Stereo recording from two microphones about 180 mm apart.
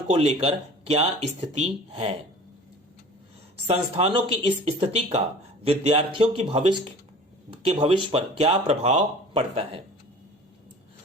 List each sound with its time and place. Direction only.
0.1 s speech: 35° right (ahead or behind)
3.7 s speech: 30° right (ahead or behind)